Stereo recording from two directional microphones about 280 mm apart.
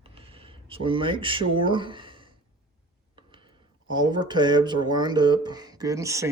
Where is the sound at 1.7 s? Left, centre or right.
Centre.